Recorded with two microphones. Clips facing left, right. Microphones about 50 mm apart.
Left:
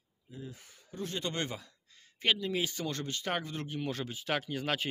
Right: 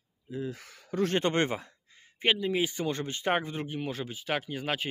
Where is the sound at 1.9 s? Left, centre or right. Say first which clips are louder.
Right 3 dB; right.